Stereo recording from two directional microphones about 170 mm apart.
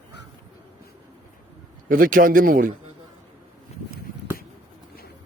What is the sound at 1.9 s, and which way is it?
Speech, 55° right (ahead or behind).